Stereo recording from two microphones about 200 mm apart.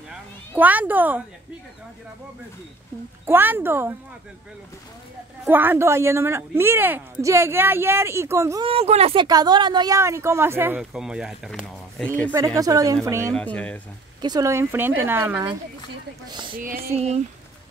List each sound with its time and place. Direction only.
0.1 s a sound: 10° right (ahead or behind)
3.3 s speech: 10° right (ahead or behind)
5.4 s speech: 10° right (ahead or behind)
8.6 s speech: 30° right (ahead or behind); by 12.1 s 5° left (ahead or behind)
12.3 s speech: 15° right (ahead or behind)
13.3 s speech: 5° left (ahead or behind)
14.2 s speech: 20° right (ahead or behind)
16.3 s speech: 20° right (ahead or behind)
16.5 s speech: 45° right (ahead or behind)
16.9 s speech: 30° right (ahead or behind)